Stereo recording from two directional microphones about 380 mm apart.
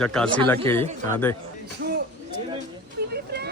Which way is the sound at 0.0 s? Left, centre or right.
Centre.